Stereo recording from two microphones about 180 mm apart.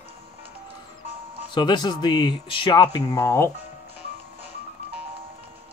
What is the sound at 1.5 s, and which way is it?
Speech, 25° left (ahead or behind).